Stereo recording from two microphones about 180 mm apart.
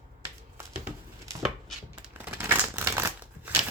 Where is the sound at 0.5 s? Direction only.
10° right (ahead or behind).